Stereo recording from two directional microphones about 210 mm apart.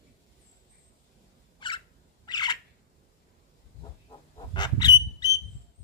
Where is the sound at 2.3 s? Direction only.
20° left (ahead or behind).